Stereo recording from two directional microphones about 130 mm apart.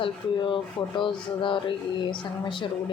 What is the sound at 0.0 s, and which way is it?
Speech, 40° left (ahead or behind).